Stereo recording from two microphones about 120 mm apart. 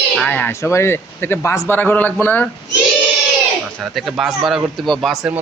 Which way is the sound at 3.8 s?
Centre (ahead or behind).